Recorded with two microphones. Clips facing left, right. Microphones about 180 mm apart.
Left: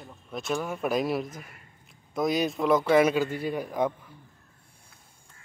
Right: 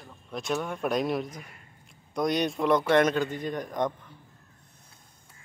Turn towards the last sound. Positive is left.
turn(degrees=5)  # may be behind; listen again after turning